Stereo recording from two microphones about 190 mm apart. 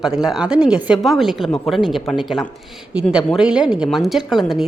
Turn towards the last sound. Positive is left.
turn(degrees=0)  # may be behind; listen again after turning